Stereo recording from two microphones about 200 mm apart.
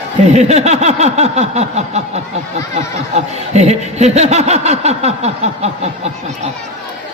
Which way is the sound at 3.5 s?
35° right (ahead or behind).